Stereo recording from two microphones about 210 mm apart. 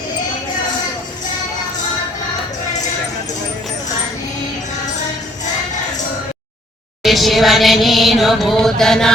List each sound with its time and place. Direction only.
7.0 s music: centre (ahead or behind)